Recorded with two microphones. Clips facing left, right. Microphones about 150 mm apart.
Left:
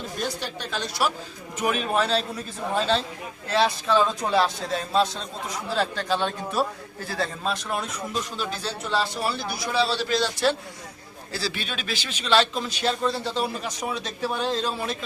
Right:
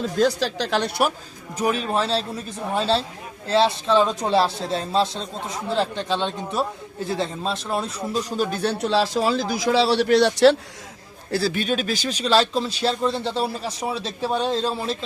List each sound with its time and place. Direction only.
0.2 s a man's voice: 90° right; by 1.1 s 60° right (ahead or behind)
1.5 s speech: 35° right (ahead or behind)
3.5 s a man's voice: 30° right (ahead or behind); by 10.6 s 75° right (ahead or behind)
11.3 s speech: 55° right (ahead or behind); by 14.9 s 25° right (ahead or behind)